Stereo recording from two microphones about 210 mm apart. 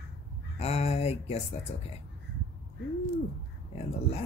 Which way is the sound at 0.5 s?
30° left (ahead or behind).